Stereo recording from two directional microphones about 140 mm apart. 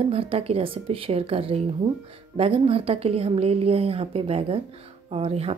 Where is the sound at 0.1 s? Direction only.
40° right (ahead or behind).